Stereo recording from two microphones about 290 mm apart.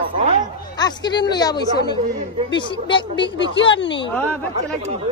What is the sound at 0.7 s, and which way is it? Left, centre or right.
Speech, centre.